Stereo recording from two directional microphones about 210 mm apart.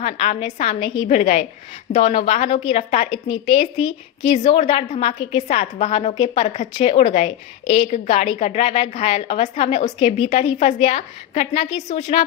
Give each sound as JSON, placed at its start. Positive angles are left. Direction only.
{"t": 0.0, "sound": "a woman's voice", "side_deg": 30}
{"t": 6.4, "sound": "a woman's voice", "side_deg": 35}